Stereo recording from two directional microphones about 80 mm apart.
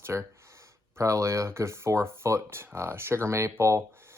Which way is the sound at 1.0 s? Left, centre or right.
Right.